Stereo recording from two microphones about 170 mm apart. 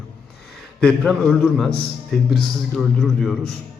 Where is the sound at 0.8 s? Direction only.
5° left (ahead or behind).